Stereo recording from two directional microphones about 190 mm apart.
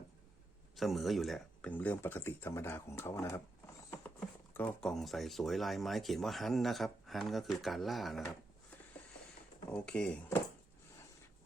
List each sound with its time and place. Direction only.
0.8 s speech: centre (ahead or behind)
9.6 s speech: 5° left (ahead or behind)